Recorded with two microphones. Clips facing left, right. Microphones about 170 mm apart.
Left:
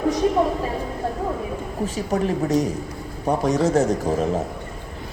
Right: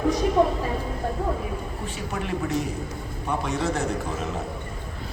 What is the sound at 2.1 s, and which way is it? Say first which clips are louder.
A man's voice: left 7 dB; 40° left (ahead or behind).